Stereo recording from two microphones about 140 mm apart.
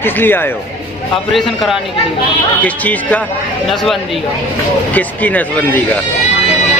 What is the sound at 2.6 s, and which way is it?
A woman's voice, 10° left (ahead or behind).